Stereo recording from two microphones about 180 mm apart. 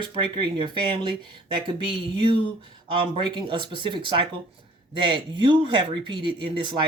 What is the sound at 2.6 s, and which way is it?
Speech, 30° right (ahead or behind).